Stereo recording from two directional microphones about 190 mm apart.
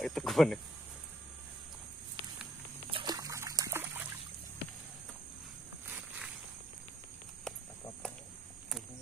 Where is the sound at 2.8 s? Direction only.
25° right (ahead or behind).